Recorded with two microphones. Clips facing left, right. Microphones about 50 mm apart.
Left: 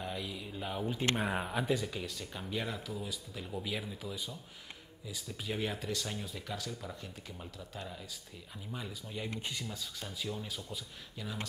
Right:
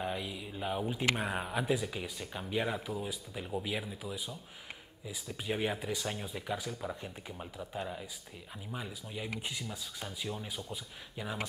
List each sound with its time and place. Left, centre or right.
0.0 s speech: centre
8.7 s speech: centre